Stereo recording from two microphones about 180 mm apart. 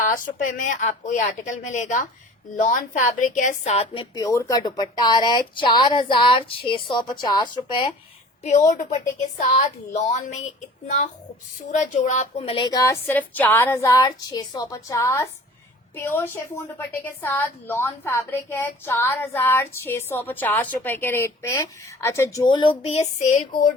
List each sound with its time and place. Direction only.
0.0 s speech: 50° left (ahead or behind)
4.1 s speech: 20° left (ahead or behind)
8.4 s a woman's voice: 40° left (ahead or behind)